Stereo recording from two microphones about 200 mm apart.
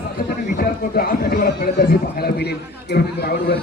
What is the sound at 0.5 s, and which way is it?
A man's voice, 50° left (ahead or behind).